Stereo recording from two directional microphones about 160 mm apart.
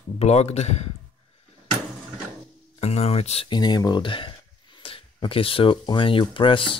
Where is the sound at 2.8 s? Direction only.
40° left (ahead or behind).